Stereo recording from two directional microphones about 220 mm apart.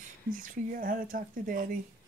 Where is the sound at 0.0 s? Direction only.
35° right (ahead or behind).